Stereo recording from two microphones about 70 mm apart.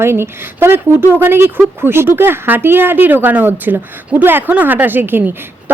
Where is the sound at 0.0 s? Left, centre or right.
Right.